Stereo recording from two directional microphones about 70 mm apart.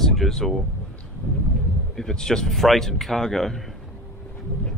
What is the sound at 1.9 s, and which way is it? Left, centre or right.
Speech, centre.